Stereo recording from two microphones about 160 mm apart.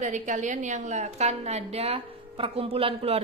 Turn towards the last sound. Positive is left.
turn(degrees=-35)  # may be behind; listen again after turning